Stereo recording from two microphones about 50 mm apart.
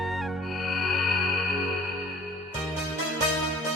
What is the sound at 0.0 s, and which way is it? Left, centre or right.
Music, centre.